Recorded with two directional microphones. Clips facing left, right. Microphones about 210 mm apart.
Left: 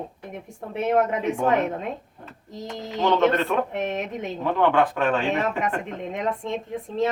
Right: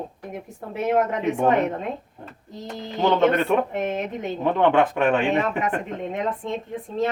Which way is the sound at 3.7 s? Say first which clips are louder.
Right 1 dB; centre (ahead or behind).